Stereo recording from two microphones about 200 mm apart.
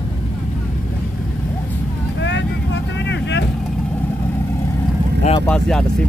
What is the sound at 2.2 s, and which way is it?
Vehicle, 60° left (ahead or behind).